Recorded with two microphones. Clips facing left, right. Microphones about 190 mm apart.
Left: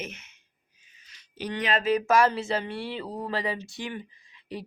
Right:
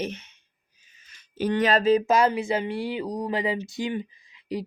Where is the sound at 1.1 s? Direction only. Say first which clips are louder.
Right 8 dB; 50° right (ahead or behind); by 2.0 s 30° right (ahead or behind).